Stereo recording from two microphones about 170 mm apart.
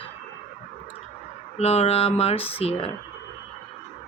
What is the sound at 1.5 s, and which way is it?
Speech, 40° left (ahead or behind).